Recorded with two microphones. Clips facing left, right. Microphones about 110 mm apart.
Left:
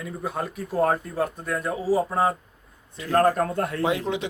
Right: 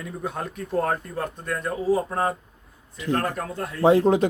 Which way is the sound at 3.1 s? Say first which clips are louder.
Left 8 dB; 45° left (ahead or behind).